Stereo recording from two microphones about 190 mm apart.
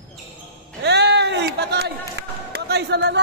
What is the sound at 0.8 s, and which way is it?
Speech, 60° right (ahead or behind).